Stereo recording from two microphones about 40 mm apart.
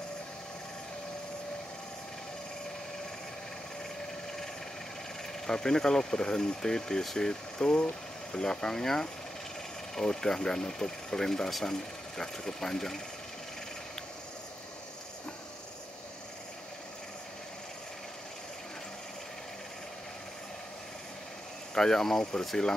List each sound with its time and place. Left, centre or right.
5.5 s speech: centre
21.7 s speech: centre